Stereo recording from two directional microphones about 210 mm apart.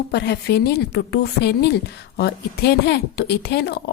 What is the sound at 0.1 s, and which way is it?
A woman's voice, 50° left (ahead or behind).